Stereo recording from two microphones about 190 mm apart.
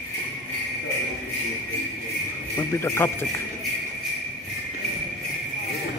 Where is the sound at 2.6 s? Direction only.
15° left (ahead or behind).